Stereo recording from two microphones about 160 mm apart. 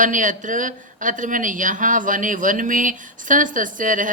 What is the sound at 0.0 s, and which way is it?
A woman's voice, 55° right (ahead or behind).